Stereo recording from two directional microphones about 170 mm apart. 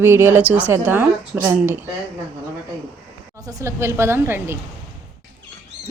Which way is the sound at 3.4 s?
15° right (ahead or behind).